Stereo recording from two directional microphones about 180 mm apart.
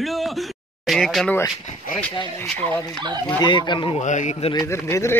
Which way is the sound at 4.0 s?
40° left (ahead or behind).